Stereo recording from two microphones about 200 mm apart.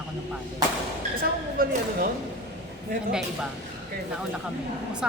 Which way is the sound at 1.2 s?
45° right (ahead or behind).